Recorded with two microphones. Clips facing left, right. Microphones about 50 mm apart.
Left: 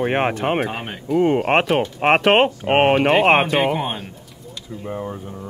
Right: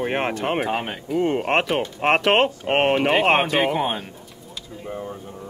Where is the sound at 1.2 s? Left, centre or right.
Centre.